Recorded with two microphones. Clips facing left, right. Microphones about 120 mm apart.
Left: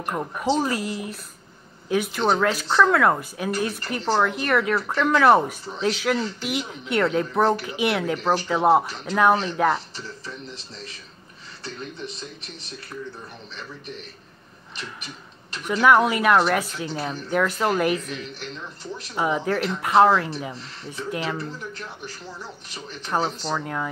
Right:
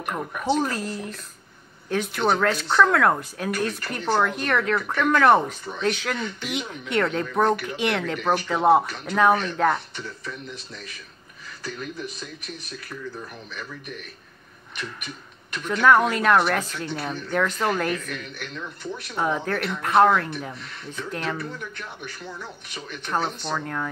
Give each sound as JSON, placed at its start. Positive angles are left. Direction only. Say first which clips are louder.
{"t": 0.6, "sound": "speech", "louder": "left 1 dB", "side_deg": 10}
{"t": 9.9, "sound": "speech", "louder": "right 1 dB", "side_deg": 35}
{"t": 11.6, "sound": "speech", "louder": "right 2 dB", "side_deg": 25}
{"t": 15.6, "sound": "speech", "louder": "left 1 dB", "side_deg": 10}
{"t": 18.0, "sound": "a woman's voice", "louder": "left 1 dB", "side_deg": -55}
{"t": 19.1, "sound": "speech", "louder": "left 2 dB", "side_deg": 5}
{"t": 20.5, "sound": "speech", "louder": "left 1 dB", "side_deg": 30}
{"t": 20.9, "sound": "speech", "louder": "left 2 dB", "side_deg": 5}
{"t": 21.4, "sound": "speech", "louder": "left 1 dB", "side_deg": 35}
{"t": 23.0, "sound": "speech", "louder": "left 2 dB", "side_deg": 5}